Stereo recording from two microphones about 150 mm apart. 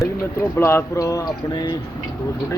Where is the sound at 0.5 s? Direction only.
15° left (ahead or behind).